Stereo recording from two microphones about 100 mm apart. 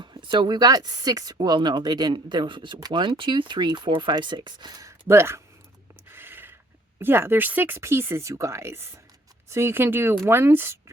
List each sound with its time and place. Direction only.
0.0 s speech: 50° right (ahead or behind); by 5.4 s 25° right (ahead or behind)
6.1 s a sound: 20° right (ahead or behind)
7.0 s speech: 20° right (ahead or behind)